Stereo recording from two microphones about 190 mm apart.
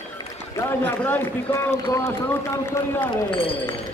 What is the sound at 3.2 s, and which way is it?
Speech, 30° left (ahead or behind).